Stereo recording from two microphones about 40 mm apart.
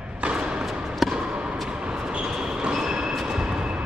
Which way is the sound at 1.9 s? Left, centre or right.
Right.